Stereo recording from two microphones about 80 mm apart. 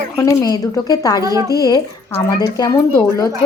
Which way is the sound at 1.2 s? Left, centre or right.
Right.